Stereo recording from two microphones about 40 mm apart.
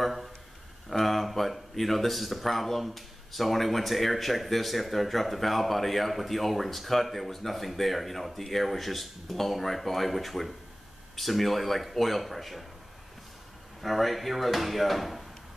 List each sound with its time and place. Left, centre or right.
0.0 s a sound: centre
0.8 s speech: centre
13.8 s speech: centre